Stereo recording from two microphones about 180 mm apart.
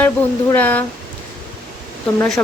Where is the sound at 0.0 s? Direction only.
10° left (ahead or behind).